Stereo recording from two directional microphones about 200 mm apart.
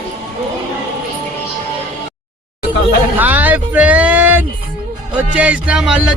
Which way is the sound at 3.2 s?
10° right (ahead or behind).